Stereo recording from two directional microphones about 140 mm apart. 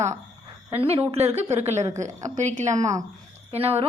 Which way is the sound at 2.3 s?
60° right (ahead or behind).